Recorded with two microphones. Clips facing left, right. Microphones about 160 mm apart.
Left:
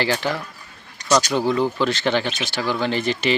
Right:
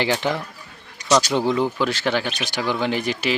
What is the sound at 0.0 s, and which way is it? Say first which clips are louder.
A man's voice: right 1 dB; 20° right (ahead or behind).